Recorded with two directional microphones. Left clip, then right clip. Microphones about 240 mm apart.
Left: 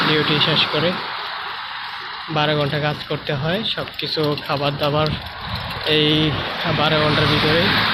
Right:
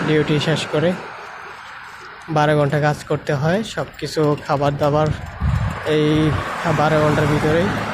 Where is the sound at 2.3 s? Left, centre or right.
Right.